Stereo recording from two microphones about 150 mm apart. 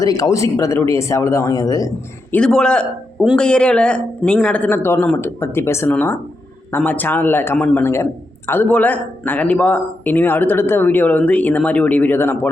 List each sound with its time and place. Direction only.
0.0 s speech: 25° left (ahead or behind)
2.3 s a man's voice: 5° left (ahead or behind)